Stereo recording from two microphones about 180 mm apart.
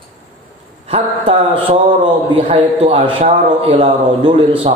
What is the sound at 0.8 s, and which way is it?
A man's voice, 30° right (ahead or behind).